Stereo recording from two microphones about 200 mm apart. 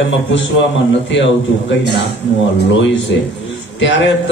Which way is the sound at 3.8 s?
65° left (ahead or behind).